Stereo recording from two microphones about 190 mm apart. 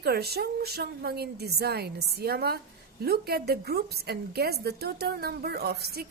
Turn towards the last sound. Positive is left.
turn(degrees=-55)  # may be behind; listen again after turning